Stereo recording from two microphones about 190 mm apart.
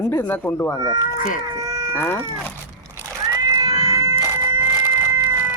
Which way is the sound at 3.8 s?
30° left (ahead or behind).